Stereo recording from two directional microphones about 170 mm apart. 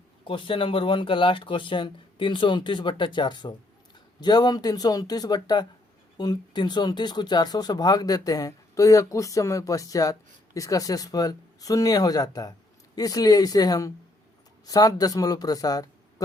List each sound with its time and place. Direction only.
0.3 s speech: 30° left (ahead or behind)